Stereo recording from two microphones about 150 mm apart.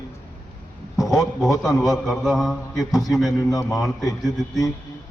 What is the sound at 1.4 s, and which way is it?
A man's voice, centre (ahead or behind).